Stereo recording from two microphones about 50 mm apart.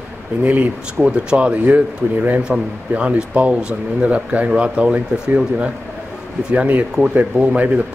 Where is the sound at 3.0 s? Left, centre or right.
Right.